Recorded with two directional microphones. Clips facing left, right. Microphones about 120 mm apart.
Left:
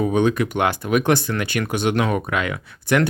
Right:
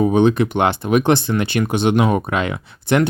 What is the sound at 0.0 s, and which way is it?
Speech, 25° right (ahead or behind).